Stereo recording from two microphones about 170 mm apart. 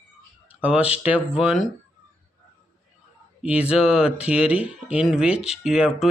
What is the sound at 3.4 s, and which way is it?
Speech, 5° right (ahead or behind).